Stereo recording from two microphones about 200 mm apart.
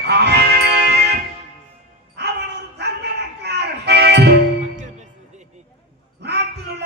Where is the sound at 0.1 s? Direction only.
55° right (ahead or behind).